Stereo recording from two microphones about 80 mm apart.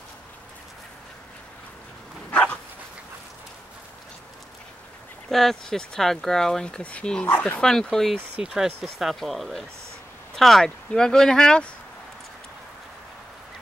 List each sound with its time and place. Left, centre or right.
2.3 s dog: centre
5.3 s speech: centre; by 7.6 s left
7.9 s speech: centre